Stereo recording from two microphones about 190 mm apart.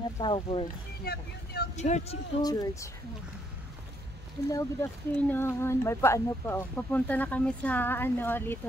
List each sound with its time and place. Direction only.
0.2 s speech: 25° left (ahead or behind)
1.0 s speech: 55° left (ahead or behind)
1.8 s speech: 35° left (ahead or behind)
2.4 s speech: 15° left (ahead or behind)
4.5 s speech: 15° left (ahead or behind)